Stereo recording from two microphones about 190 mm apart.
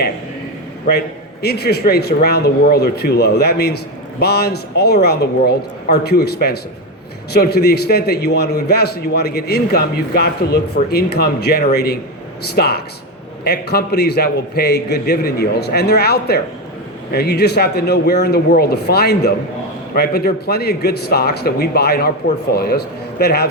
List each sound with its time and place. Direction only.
0.9 s a man's voice: 55° left (ahead or behind)